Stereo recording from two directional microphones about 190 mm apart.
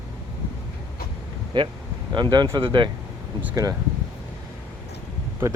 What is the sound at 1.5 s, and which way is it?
Speech, 25° right (ahead or behind).